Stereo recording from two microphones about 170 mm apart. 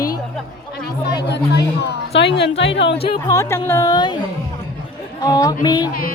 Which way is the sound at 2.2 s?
90° left.